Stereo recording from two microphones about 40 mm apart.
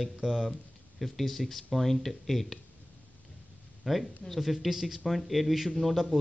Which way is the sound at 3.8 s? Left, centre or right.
Centre.